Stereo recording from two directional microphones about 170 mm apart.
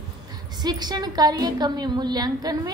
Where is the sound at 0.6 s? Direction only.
25° right (ahead or behind).